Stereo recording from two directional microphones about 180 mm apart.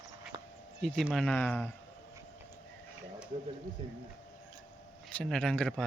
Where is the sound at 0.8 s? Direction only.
Centre (ahead or behind).